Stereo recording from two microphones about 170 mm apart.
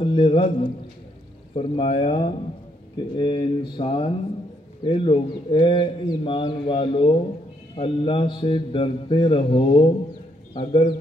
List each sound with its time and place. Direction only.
0.0 s a man's voice: 30° left (ahead or behind)